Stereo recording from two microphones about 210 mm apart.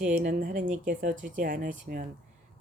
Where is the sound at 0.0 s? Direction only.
40° right (ahead or behind).